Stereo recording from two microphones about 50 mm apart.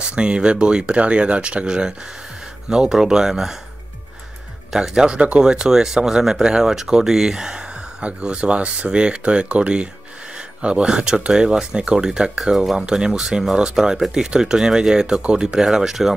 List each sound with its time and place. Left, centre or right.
0.1 s speech: right
4.7 s speech: centre
12.5 s speech: centre
12.8 s speech: centre